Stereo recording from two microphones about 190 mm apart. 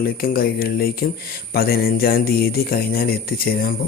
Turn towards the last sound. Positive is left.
turn(degrees=50)  # may be behind; listen again after turning